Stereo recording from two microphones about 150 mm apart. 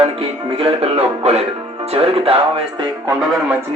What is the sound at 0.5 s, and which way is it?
Speech, 40° right (ahead or behind).